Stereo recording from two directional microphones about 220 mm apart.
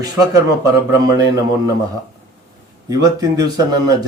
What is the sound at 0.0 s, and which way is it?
A man's voice, 15° right (ahead or behind).